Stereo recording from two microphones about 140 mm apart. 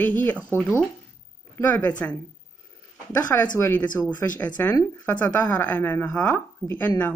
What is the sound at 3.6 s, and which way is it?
Speech, 15° left (ahead or behind).